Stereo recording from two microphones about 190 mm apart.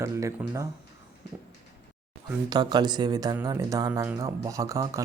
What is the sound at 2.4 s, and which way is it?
Speech, 20° right (ahead or behind).